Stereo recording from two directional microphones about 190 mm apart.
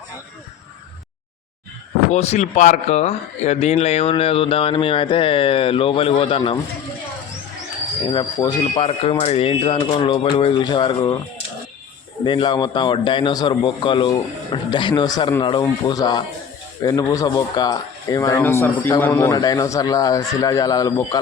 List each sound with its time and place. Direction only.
2.0 s speech: 35° left (ahead or behind)
8.1 s speech: 20° left (ahead or behind)
12.2 s speech: 25° left (ahead or behind)